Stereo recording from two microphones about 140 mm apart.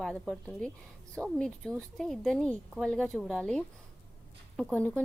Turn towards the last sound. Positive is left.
turn(degrees=0)  # may be behind; listen again after turning